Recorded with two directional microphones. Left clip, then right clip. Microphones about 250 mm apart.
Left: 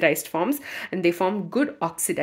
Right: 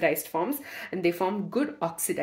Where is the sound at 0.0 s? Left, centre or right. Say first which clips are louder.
Left 4 dB; left.